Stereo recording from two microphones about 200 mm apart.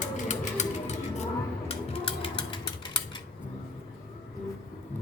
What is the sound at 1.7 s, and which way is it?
Mechanisms, 30° left (ahead or behind).